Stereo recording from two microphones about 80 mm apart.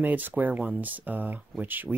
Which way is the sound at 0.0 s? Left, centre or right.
Right.